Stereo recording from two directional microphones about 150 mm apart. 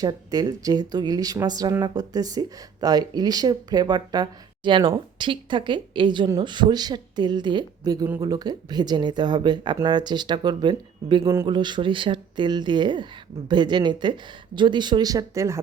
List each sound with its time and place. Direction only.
0.0 s a woman's voice: 25° right (ahead or behind)